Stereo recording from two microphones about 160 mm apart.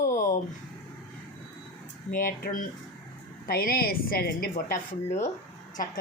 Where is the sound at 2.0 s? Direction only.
65° left (ahead or behind).